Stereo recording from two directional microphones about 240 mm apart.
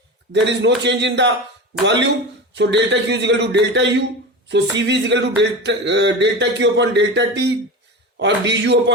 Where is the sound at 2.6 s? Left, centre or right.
Right.